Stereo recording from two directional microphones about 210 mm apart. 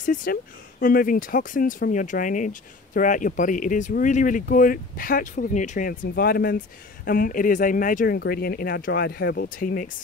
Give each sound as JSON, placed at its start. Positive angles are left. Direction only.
{"t": 0.0, "sound": "speech", "side_deg": 40}